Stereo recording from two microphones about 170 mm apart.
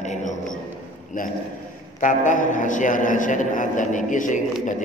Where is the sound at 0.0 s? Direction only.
45° left (ahead or behind).